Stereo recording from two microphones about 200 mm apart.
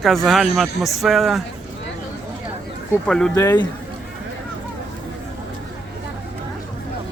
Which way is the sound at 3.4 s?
15° left (ahead or behind).